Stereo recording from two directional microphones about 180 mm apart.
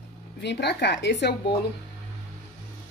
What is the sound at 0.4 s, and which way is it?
Speech, 70° left (ahead or behind).